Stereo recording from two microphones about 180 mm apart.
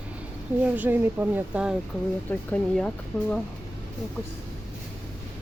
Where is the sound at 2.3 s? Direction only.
5° left (ahead or behind).